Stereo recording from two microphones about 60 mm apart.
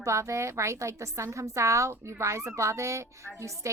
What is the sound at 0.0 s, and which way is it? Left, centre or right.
A woman's voice, right.